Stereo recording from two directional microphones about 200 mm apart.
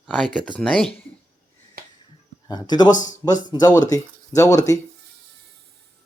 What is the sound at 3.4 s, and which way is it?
Speech, 20° left (ahead or behind).